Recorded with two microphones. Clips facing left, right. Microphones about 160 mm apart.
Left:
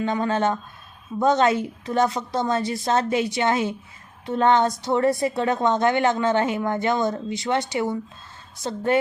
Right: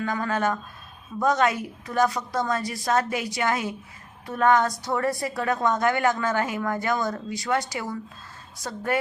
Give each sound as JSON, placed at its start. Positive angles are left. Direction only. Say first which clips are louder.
{"t": 0.0, "sound": "a woman's voice", "louder": "left 3 dB", "side_deg": 25}